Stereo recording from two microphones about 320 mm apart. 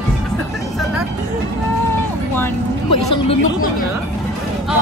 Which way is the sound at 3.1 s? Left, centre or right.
Centre.